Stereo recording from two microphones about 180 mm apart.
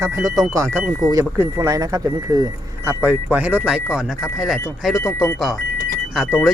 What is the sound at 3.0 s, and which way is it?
Speech, 10° right (ahead or behind).